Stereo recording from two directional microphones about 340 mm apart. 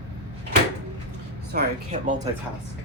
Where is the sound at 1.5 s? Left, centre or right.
Right.